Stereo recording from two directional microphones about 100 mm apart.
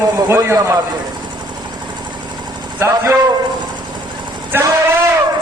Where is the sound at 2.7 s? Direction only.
25° right (ahead or behind).